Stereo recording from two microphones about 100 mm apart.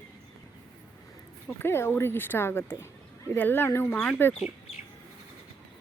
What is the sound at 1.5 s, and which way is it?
Speech, 20° left (ahead or behind).